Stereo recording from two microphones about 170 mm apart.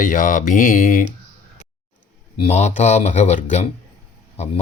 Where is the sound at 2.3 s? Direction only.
40° left (ahead or behind).